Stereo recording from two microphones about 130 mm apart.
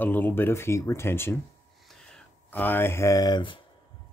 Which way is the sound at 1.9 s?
5° left (ahead or behind).